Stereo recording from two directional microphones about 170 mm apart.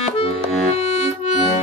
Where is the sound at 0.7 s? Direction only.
40° left (ahead or behind).